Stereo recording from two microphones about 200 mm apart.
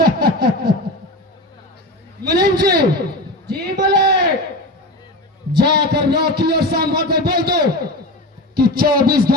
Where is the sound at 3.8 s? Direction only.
55° right (ahead or behind).